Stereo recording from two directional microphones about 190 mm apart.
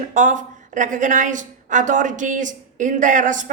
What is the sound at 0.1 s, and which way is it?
A woman's voice, 40° right (ahead or behind).